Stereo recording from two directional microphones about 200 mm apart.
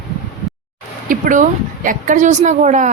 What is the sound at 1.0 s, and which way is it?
Speech, 40° right (ahead or behind).